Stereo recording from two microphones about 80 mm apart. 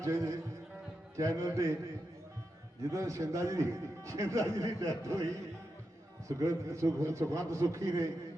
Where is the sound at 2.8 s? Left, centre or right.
Right.